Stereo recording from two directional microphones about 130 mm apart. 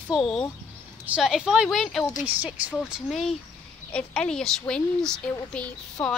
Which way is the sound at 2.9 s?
Centre (ahead or behind).